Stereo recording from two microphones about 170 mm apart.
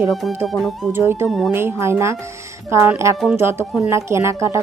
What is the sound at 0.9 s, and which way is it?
Speech, 15° right (ahead or behind).